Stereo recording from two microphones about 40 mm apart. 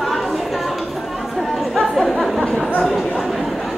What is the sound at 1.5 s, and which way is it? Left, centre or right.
Chatter, centre.